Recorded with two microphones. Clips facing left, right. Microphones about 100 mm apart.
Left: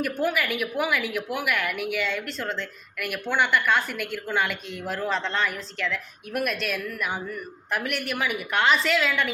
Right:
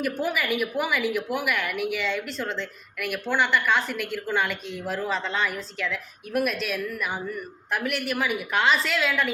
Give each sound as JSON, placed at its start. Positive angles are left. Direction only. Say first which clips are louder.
{"t": 0.0, "sound": "a woman's voice", "louder": "left 1 dB", "side_deg": 0}